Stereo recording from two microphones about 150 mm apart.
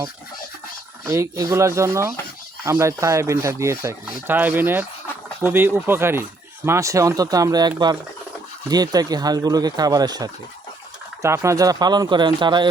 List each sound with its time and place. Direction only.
1.0 s speech: 20° right (ahead or behind)
8.7 s speech: 25° right (ahead or behind)